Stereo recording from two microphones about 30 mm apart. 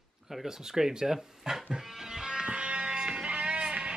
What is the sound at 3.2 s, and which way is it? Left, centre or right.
Music, right.